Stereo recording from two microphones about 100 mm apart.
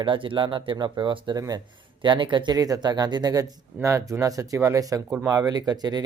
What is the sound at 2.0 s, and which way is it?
Speech, 55° right (ahead or behind).